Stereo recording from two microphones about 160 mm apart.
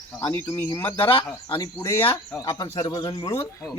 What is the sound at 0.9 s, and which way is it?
Speech, 30° left (ahead or behind).